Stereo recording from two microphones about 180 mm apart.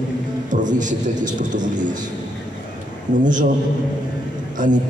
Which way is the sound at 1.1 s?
25° right (ahead or behind).